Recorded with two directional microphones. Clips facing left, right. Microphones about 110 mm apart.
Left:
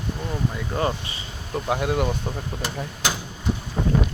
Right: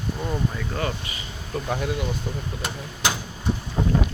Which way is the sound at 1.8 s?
55° left (ahead or behind).